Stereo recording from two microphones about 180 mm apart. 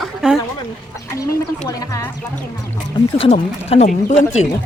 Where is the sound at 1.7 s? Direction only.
20° left (ahead or behind).